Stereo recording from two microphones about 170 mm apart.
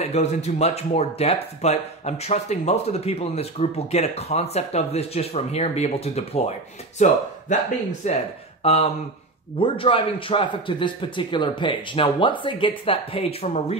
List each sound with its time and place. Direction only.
0.0 s speech: 40° left (ahead or behind)